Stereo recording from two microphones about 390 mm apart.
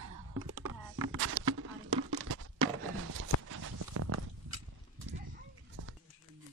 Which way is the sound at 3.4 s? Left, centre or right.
Right.